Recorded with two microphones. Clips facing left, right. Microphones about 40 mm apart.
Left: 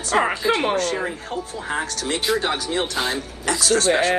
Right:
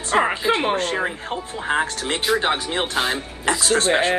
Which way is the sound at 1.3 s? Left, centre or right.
Right.